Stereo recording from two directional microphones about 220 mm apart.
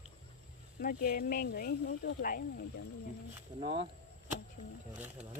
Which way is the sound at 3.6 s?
25° right (ahead or behind).